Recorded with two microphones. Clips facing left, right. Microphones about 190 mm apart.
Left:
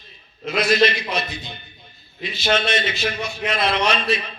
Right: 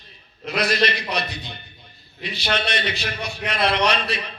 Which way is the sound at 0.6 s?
65° right (ahead or behind).